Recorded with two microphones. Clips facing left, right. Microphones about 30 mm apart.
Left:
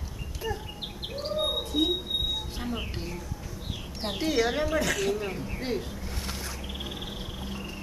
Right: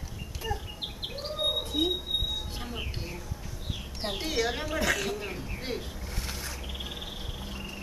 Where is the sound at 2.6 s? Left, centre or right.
Centre.